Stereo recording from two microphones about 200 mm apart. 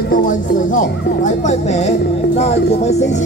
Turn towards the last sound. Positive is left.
turn(degrees=35)  # may be behind; listen again after turning